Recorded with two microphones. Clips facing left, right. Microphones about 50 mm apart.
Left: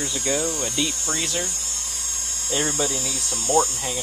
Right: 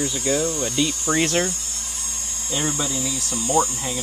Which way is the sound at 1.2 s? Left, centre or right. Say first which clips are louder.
Right 7 dB; right.